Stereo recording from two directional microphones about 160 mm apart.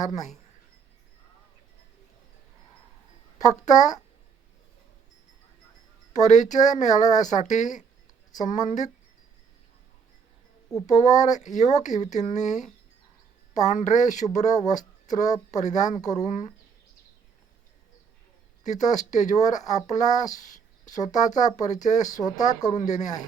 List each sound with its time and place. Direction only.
0.0 s speech: 50° left (ahead or behind)
3.7 s speech: 50° left (ahead or behind)
6.1 s speech: 50° left (ahead or behind)
10.7 s speech: 25° left (ahead or behind)
11.2 s speech: 50° left (ahead or behind)
18.6 s speech: 50° left (ahead or behind)
22.1 s speech: 25° left (ahead or behind)
22.7 s speech: 45° left (ahead or behind)